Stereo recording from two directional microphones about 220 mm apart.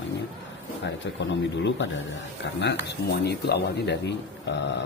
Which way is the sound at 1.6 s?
55° left (ahead or behind).